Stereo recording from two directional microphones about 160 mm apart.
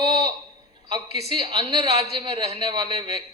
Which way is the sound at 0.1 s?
25° right (ahead or behind).